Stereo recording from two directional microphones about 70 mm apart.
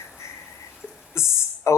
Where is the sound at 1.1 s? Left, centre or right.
Left.